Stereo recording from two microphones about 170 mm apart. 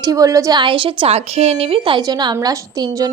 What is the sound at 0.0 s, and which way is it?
A woman's voice, 20° right (ahead or behind).